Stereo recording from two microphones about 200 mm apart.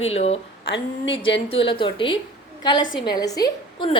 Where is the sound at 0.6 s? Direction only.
70° left (ahead or behind).